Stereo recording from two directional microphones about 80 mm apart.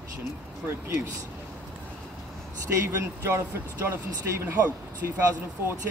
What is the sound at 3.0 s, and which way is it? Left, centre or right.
Speech, right.